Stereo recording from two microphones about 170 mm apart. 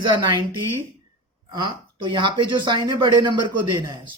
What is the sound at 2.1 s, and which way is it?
Speech, 30° right (ahead or behind).